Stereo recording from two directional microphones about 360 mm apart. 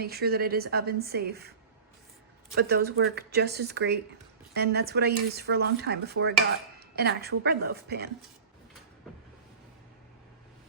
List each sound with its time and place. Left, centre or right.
0.0 s speech: right
2.6 s speech: right